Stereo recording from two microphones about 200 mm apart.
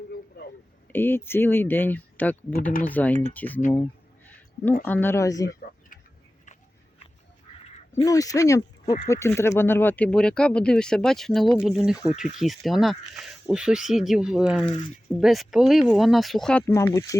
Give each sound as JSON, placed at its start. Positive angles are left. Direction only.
{"t": 0.1, "sound": "a sound", "side_deg": 50}
{"t": 0.9, "sound": "speech", "side_deg": 10}
{"t": 4.9, "sound": "speech", "side_deg": 10}
{"t": 8.0, "sound": "speech", "side_deg": 15}
{"t": 16.8, "sound": "speech", "side_deg": 20}